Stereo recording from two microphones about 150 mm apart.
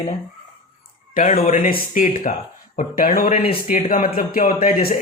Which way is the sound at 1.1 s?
50° left (ahead or behind).